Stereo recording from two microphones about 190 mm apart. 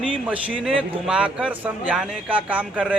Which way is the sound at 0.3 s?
5° right (ahead or behind).